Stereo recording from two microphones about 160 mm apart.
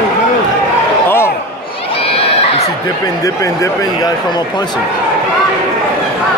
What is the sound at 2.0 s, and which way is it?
Crowd, 35° left (ahead or behind).